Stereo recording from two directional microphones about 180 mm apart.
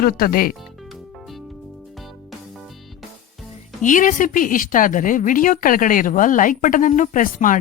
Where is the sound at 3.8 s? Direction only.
45° left (ahead or behind).